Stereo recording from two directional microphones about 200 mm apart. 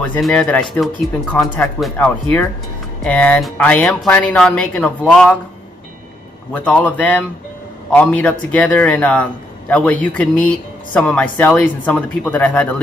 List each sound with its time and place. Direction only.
0.0 s a man's voice: 5° left (ahead or behind)
6.5 s a man's voice: 5° left (ahead or behind)